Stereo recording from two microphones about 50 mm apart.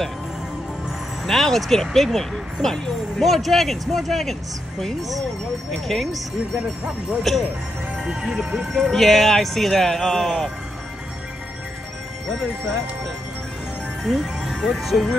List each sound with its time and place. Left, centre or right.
1.2 s speech: centre
6.5 s speech: centre
8.9 s speech: centre
14.0 s speech: centre